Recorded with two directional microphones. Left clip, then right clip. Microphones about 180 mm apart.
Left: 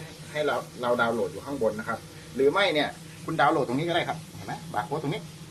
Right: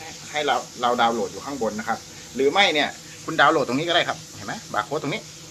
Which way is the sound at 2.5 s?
Centre (ahead or behind).